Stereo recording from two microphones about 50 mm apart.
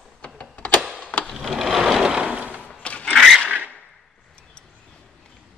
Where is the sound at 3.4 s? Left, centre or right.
Right.